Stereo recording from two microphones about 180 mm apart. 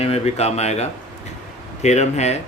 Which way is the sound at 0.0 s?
35° left (ahead or behind).